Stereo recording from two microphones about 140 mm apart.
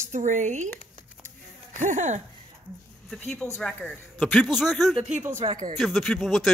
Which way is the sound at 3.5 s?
5° left (ahead or behind).